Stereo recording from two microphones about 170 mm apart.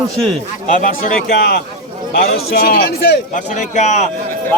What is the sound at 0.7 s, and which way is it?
A man's voice, 50° left (ahead or behind).